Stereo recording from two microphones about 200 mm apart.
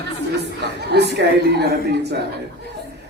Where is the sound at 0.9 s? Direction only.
55° right (ahead or behind).